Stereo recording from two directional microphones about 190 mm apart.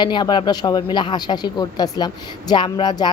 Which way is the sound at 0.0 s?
25° left (ahead or behind).